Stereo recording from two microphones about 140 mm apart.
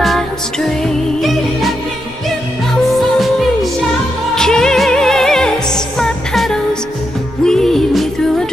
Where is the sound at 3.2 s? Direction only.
Centre (ahead or behind).